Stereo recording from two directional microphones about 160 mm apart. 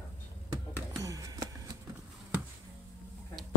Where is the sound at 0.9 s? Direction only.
20° right (ahead or behind).